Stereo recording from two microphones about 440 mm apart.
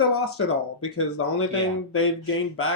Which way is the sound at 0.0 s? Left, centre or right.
Left.